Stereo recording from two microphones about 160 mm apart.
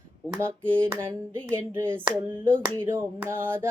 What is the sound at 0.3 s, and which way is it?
Speech, 15° right (ahead or behind).